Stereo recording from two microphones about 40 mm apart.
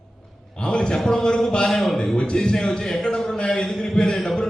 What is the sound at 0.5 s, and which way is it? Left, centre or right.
A man's voice, left.